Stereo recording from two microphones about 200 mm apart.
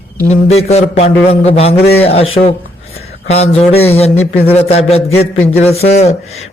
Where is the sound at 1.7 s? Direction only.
55° left (ahead or behind).